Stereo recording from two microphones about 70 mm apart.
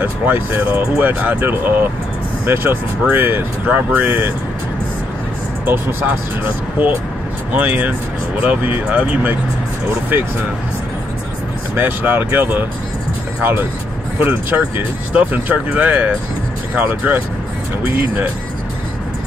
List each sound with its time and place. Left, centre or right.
0.0 s speech: right
5.7 s speech: right
11.7 s speech: right